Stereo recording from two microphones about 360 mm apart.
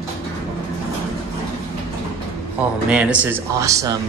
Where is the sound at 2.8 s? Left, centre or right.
Centre.